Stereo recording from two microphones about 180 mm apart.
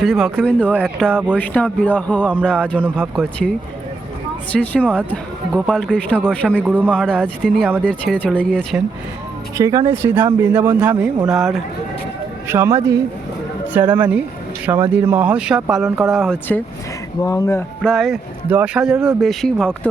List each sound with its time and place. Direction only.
0.0 s speech: centre (ahead or behind)
4.6 s speech: 10° left (ahead or behind)
6.6 s a man's voice: 10° right (ahead or behind)
6.9 s speech: 5° left (ahead or behind)
9.6 s a man's voice: 15° right (ahead or behind); by 11.6 s centre (ahead or behind)
12.5 s a man's voice: 15° right (ahead or behind); by 16.6 s 5° left (ahead or behind)
17.2 s speech: 20° left (ahead or behind)
17.8 s speech: centre (ahead or behind)